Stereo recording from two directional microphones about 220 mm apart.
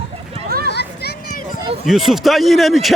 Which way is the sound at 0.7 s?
50° left (ahead or behind).